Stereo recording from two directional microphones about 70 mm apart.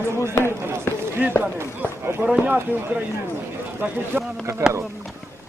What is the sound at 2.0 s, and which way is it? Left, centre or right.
Speech, right.